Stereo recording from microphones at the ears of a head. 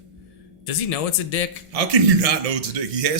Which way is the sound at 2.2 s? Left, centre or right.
Right.